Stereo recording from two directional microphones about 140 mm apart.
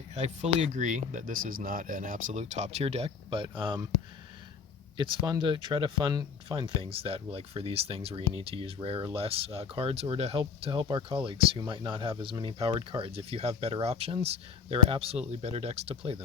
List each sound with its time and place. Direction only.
0.1 s speech: 50° right (ahead or behind)
0.6 s speech: 60° right (ahead or behind)
2.4 s speech: 50° right (ahead or behind); by 3.8 s 35° right (ahead or behind)
4.9 s speech: 35° right (ahead or behind)